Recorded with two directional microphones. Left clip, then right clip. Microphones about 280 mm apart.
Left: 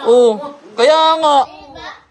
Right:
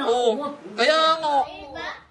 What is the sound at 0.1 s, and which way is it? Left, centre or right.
Speech, left.